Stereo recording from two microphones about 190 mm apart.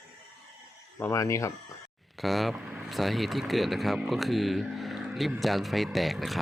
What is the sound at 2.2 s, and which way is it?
Speech, centre (ahead or behind).